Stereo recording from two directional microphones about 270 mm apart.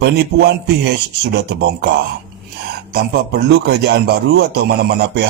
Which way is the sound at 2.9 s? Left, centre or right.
Right.